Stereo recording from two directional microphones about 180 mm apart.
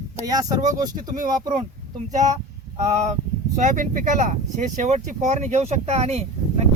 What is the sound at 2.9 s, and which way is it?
Speech, 40° right (ahead or behind).